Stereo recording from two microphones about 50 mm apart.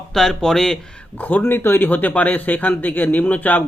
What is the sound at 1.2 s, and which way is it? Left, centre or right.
Speech, left.